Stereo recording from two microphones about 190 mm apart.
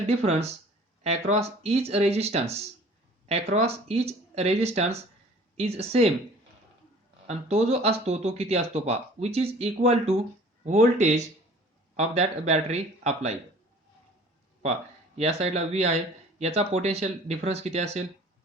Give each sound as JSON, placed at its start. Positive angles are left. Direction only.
{"t": 0.1, "sound": "speech", "side_deg": -35}
{"t": 7.3, "sound": "speech", "side_deg": -35}
{"t": 14.6, "sound": "speech", "side_deg": -35}